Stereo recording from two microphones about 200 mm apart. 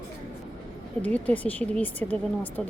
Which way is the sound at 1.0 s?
10° left (ahead or behind).